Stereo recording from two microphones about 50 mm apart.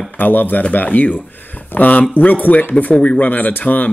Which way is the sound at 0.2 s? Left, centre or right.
Left.